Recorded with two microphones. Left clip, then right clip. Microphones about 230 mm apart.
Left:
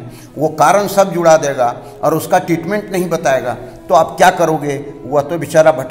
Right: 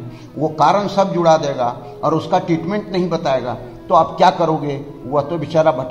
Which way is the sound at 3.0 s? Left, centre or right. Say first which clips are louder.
Left 5 dB; left.